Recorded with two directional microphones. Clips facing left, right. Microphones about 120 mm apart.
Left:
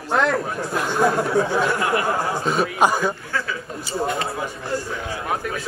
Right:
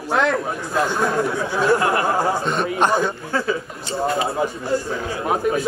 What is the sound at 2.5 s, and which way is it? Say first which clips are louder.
Speech: left 1 dB; 5° left (ahead or behind).